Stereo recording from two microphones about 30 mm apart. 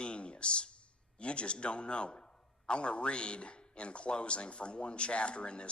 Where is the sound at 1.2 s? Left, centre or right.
Left.